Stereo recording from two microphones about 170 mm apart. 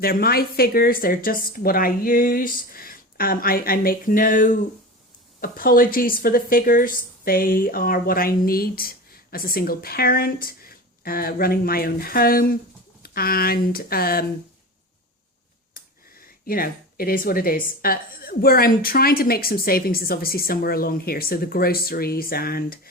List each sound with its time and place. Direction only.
0.0 s a woman's voice: 60° left (ahead or behind)
16.5 s a woman's voice: 60° left (ahead or behind)